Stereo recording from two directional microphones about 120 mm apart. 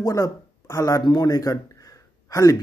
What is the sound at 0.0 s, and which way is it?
A man's voice, 25° left (ahead or behind).